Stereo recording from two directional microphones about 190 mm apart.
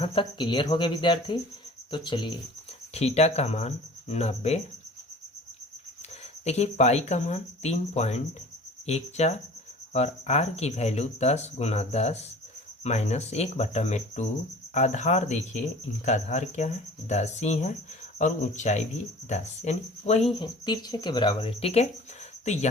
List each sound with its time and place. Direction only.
0.0 s speech: 30° left (ahead or behind)
2.9 s speech: 35° left (ahead or behind)
6.4 s speech: 35° left (ahead or behind)